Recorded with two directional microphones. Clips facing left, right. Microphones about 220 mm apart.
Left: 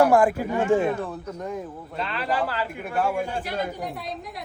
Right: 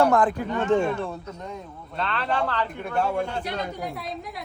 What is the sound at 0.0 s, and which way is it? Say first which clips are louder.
A woman's voice: left 2 dB; 10° left (ahead or behind).